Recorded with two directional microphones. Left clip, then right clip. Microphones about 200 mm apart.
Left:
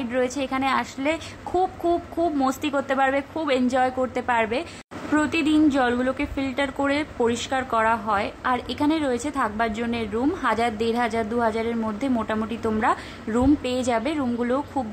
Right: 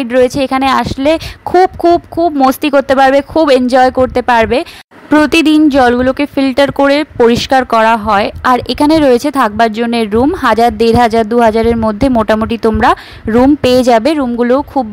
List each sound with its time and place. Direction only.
0.0 s speech: 45° right (ahead or behind)
2.4 s speech: 45° right (ahead or behind)